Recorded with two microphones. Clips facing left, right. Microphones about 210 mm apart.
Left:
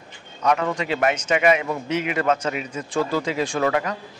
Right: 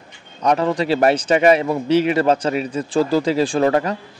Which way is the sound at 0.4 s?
35° right (ahead or behind).